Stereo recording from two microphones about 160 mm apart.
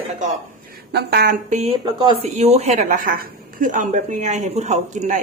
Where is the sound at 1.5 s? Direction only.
45° right (ahead or behind).